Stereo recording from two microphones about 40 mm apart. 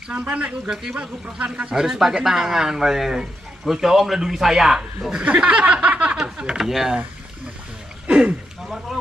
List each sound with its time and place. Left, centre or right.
0.1 s speech: right
1.7 s speech: centre
5.5 s a sound: right
6.2 s speech: right
6.6 s speech: centre
8.1 s a sound: right